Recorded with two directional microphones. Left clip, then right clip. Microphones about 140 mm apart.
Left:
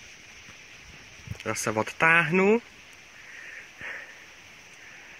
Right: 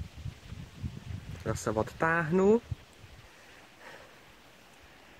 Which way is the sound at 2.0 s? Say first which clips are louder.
Left 9 dB; 15° left (ahead or behind).